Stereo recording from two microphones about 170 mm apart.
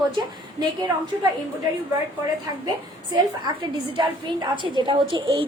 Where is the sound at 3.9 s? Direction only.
30° right (ahead or behind).